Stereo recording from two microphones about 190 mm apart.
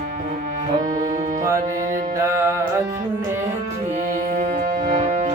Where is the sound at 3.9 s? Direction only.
45° right (ahead or behind).